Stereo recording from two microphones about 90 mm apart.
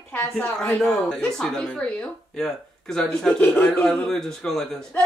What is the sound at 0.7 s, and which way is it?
A man's voice, 10° left (ahead or behind).